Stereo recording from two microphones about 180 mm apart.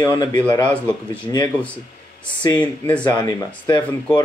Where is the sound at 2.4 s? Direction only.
25° left (ahead or behind).